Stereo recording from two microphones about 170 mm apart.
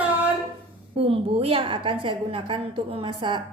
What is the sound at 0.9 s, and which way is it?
A woman's voice, 35° right (ahead or behind).